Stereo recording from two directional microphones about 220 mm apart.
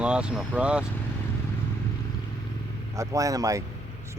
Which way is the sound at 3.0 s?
15° right (ahead or behind).